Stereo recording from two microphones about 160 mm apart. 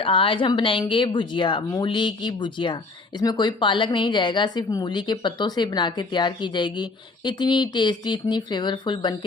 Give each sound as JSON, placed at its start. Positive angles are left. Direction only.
{"t": 0.0, "sound": "a woman's voice", "side_deg": 35}